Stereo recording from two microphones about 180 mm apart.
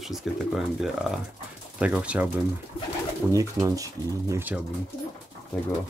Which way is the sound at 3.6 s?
15° right (ahead or behind).